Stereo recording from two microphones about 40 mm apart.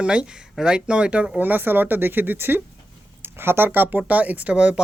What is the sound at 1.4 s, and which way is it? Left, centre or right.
Speech, right.